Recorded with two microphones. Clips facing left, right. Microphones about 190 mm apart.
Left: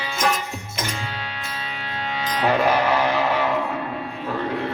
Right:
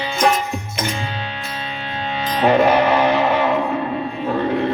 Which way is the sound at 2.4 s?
20° right (ahead or behind).